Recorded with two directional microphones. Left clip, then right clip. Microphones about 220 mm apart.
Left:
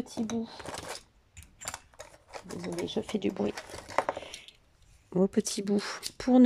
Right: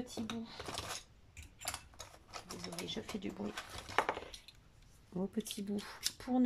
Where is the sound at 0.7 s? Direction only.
30° left (ahead or behind).